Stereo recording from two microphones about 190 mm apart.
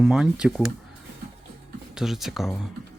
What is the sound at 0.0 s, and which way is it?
Speech, 5° right (ahead or behind).